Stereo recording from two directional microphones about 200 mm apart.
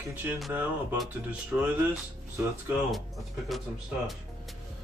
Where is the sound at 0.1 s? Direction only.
10° right (ahead or behind).